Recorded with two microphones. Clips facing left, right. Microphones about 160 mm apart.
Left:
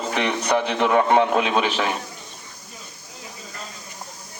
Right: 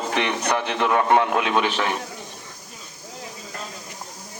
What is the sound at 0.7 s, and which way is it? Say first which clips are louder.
A man's voice: left 1 dB; 20° left (ahead or behind).